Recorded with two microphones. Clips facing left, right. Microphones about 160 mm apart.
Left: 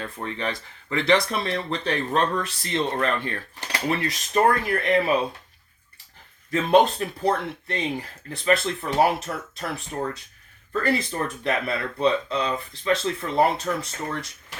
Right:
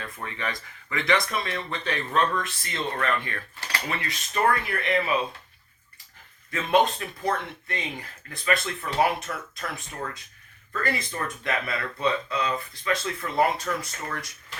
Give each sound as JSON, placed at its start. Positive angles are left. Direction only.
{"t": 0.0, "sound": "speech", "side_deg": 30}
{"t": 6.5, "sound": "speech", "side_deg": 35}